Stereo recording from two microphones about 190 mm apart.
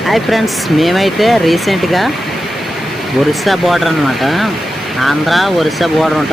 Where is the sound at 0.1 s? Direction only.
Centre (ahead or behind).